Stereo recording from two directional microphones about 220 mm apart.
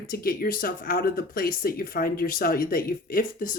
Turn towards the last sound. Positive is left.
turn(degrees=40)  # may be behind; listen again after turning